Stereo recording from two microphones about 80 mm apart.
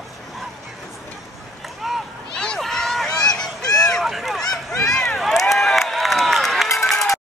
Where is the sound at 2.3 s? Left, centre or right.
Centre.